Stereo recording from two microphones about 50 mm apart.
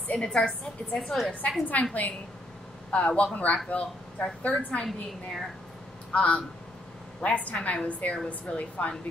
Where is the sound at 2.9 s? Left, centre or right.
Left.